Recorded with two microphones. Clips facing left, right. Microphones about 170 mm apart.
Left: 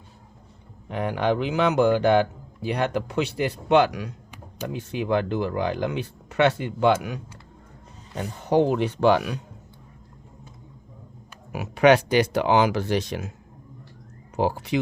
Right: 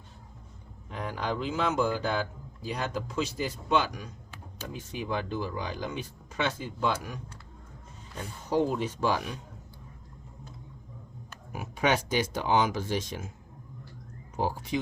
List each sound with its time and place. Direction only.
0.9 s a man's voice: 70° left (ahead or behind)
11.5 s a man's voice: 75° left (ahead or behind)
14.3 s a man's voice: 70° left (ahead or behind)